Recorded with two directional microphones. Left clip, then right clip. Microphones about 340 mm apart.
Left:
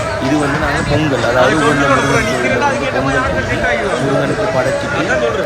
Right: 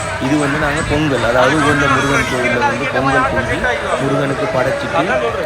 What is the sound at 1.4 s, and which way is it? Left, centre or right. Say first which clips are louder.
Speech: left 1 dB; centre.